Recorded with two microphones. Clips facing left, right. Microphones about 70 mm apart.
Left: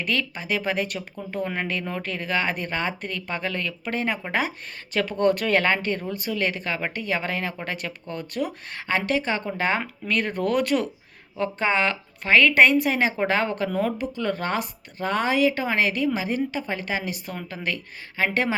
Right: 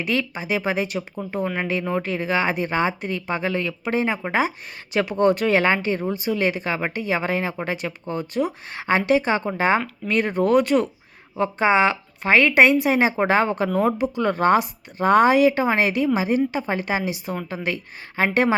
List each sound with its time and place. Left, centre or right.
0.0 s speech: centre
4.1 s speech: centre
8.7 s a woman's voice: centre
11.3 s speech: centre
14.2 s a woman's voice: right
17.1 s a woman's voice: centre